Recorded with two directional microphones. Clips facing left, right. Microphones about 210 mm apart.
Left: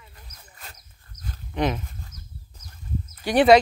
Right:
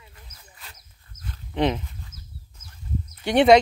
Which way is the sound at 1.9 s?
40° left (ahead or behind).